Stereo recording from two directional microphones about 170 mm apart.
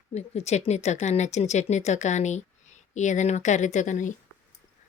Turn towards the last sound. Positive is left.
turn(degrees=45)  # may be behind; listen again after turning